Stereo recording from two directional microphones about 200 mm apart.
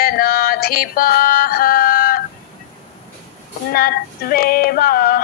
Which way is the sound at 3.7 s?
45° left (ahead or behind).